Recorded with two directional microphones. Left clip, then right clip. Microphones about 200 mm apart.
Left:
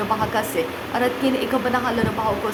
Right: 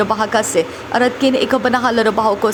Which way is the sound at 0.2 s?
35° right (ahead or behind).